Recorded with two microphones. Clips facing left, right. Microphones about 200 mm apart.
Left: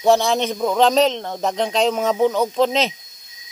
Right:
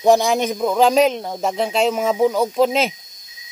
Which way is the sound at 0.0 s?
15° right (ahead or behind).